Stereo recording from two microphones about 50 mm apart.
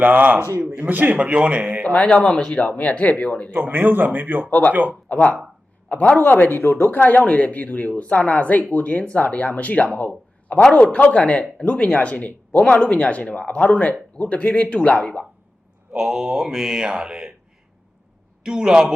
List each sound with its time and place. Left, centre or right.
0.0 s a man's voice: right
1.2 s speech: right
2.0 s speech: left
2.6 s speech: left
3.5 s a man's voice: right
4.4 s speech: left
4.7 s a man's voice: right
5.0 s speech: left
16.0 s mantra: centre
18.4 s mantra: centre